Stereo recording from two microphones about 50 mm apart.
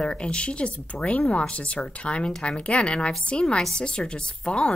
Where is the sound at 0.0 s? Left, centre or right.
Left.